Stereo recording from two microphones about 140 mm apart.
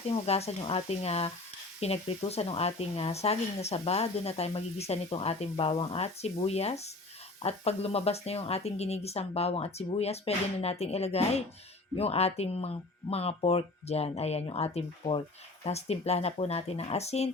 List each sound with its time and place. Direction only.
0.1 s speech: 50° left (ahead or behind)